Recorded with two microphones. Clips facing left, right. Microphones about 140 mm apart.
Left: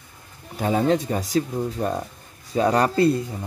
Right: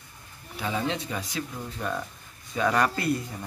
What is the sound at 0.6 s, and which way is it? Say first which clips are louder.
Speech: left 9 dB; 45° left (ahead or behind).